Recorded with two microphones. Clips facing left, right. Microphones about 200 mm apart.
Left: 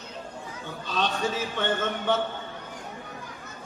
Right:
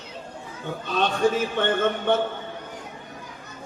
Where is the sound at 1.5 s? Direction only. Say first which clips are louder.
Right 5 dB; 55° right (ahead or behind).